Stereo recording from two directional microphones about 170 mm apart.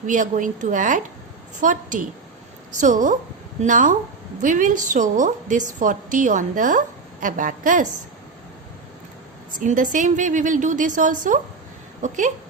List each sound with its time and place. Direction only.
0.0 s a woman's voice: 50° right (ahead or behind)
9.6 s a woman's voice: 50° right (ahead or behind)